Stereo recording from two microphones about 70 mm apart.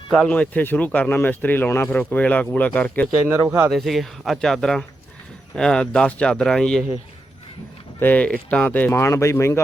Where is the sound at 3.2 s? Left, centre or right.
Right.